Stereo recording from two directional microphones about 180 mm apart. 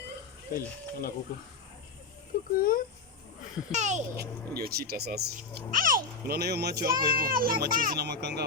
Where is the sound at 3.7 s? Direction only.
40° right (ahead or behind).